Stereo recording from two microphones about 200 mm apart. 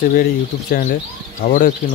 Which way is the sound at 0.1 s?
45° left (ahead or behind).